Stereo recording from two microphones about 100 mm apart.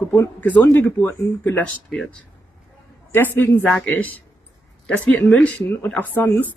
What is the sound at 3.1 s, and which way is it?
Speech, 20° left (ahead or behind).